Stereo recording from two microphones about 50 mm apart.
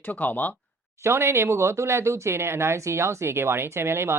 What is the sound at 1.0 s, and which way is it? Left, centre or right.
Speech, right.